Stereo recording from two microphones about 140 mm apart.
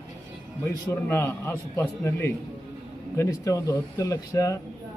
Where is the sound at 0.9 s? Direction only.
15° left (ahead or behind).